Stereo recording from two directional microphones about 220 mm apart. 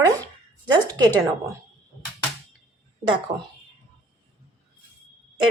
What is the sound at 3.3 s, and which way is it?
Speech, 30° right (ahead or behind).